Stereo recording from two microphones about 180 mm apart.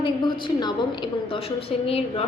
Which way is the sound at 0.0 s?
25° left (ahead or behind).